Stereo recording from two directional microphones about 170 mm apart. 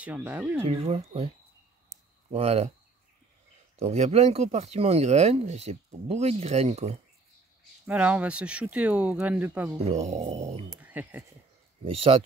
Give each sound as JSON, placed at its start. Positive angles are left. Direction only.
{"t": 0.0, "sound": "speech", "side_deg": -10}
{"t": 0.6, "sound": "speech", "side_deg": -35}
{"t": 2.3, "sound": "speech", "side_deg": -40}
{"t": 3.7, "sound": "speech", "side_deg": -40}
{"t": 7.8, "sound": "speech", "side_deg": -5}
{"t": 9.8, "sound": "speech", "side_deg": -40}
{"t": 10.8, "sound": "speech", "side_deg": -10}
{"t": 11.8, "sound": "speech", "side_deg": -35}